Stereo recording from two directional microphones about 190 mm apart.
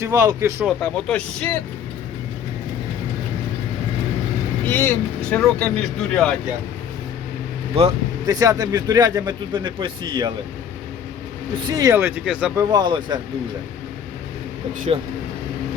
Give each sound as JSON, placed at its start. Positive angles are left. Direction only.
{"t": 0.0, "sound": "speech", "side_deg": -15}
{"t": 0.8, "sound": "speech", "side_deg": 5}
{"t": 4.6, "sound": "speech", "side_deg": 10}
{"t": 8.3, "sound": "speech", "side_deg": -20}
{"t": 11.6, "sound": "speech", "side_deg": -20}
{"t": 12.5, "sound": "speech", "side_deg": -20}